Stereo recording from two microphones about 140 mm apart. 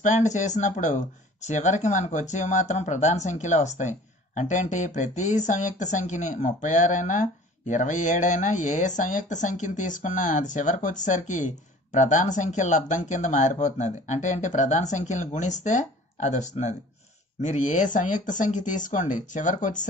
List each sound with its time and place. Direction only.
0.0 s speech: 60° left (ahead or behind)